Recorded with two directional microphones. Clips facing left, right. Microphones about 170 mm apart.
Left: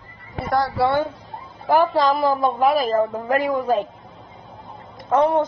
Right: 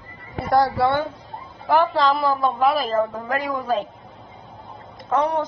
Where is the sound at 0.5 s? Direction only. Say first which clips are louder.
Right 2 dB; centre (ahead or behind).